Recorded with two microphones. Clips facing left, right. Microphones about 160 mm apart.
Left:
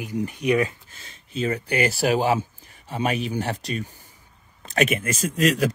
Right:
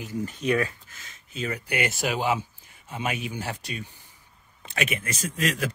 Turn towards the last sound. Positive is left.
turn(degrees=40)  # may be behind; listen again after turning